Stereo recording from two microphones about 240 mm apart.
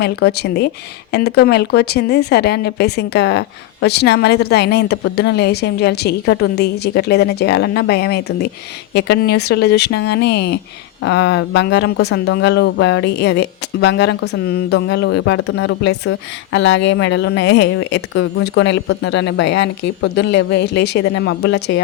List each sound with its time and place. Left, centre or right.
0.0 s speech: left